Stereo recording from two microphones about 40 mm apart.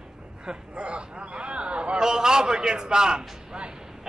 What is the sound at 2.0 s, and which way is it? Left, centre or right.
A man's voice, centre.